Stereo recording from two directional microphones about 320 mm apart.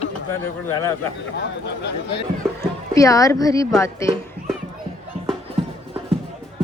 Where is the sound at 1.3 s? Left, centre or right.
Left.